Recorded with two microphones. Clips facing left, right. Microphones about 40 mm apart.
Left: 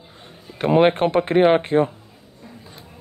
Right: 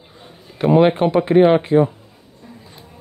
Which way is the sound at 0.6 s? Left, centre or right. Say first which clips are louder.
Right 2 dB; left.